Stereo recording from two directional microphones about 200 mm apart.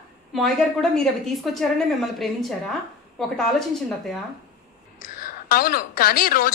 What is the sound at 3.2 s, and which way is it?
Speech, centre (ahead or behind).